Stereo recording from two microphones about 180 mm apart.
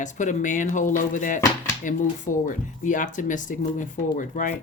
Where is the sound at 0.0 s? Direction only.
45° left (ahead or behind).